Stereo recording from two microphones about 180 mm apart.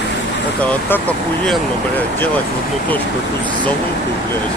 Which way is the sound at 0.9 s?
10° left (ahead or behind).